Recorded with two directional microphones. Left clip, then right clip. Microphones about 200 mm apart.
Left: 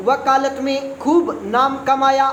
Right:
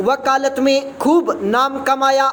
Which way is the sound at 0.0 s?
30° right (ahead or behind).